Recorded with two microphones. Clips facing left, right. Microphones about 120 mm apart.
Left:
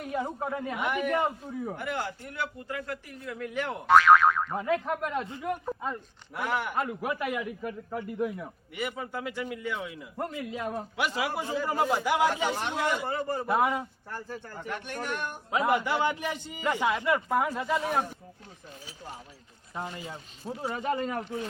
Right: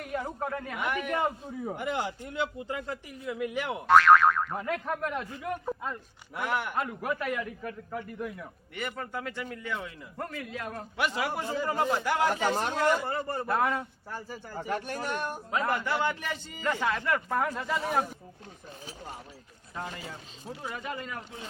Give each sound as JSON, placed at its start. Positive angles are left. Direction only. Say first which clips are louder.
{"t": 0.0, "sound": "a man's voice", "louder": "left 2 dB", "side_deg": 15}
{"t": 1.6, "sound": "a man's voice", "louder": "right 2 dB", "side_deg": -20}
{"t": 3.1, "sound": "speech", "louder": "right 4 dB", "side_deg": -10}
{"t": 6.3, "sound": "speech", "louder": "left 1 dB", "side_deg": 0}
{"t": 7.1, "sound": "a man's voice", "louder": "even", "side_deg": 15}
{"t": 10.2, "sound": "a man's voice", "louder": "left 3 dB", "side_deg": 20}
{"t": 10.9, "sound": "a man's voice", "louder": "right 2 dB", "side_deg": 5}
{"t": 14.1, "sound": "speech", "louder": "right 1 dB", "side_deg": -10}
{"t": 14.7, "sound": "speech", "louder": "right 2 dB", "side_deg": -40}
{"t": 15.4, "sound": "a man's voice", "louder": "left 4 dB", "side_deg": 10}
{"t": 19.7, "sound": "speech", "louder": "left 2 dB", "side_deg": 20}